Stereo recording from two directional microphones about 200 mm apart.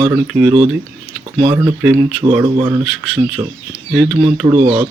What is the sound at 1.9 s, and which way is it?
Speech, 20° right (ahead or behind).